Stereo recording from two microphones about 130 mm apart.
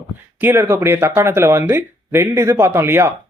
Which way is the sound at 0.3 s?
20° right (ahead or behind).